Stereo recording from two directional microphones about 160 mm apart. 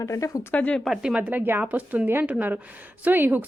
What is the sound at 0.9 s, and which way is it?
Speech, 5° right (ahead or behind).